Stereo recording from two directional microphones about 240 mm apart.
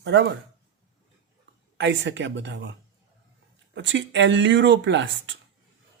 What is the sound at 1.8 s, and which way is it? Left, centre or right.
Speech, right.